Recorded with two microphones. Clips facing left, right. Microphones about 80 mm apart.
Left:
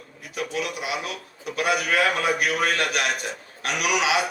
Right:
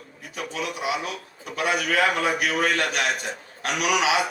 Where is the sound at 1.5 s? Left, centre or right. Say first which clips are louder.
Left 1 dB; right.